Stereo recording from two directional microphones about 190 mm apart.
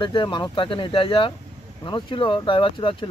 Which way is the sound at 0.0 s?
25° left (ahead or behind).